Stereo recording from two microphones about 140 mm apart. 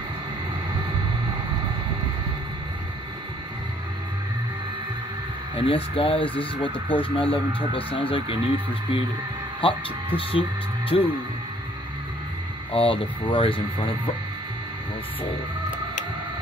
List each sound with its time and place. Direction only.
5.7 s speech: 40° left (ahead or behind)
9.6 s speech: 40° left (ahead or behind)
12.7 s speech: 40° left (ahead or behind)